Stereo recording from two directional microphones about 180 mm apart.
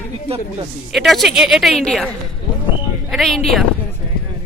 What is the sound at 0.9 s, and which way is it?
A woman's voice, centre (ahead or behind).